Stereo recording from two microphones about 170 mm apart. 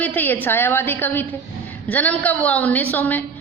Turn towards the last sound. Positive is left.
turn(degrees=10)  # may be behind; listen again after turning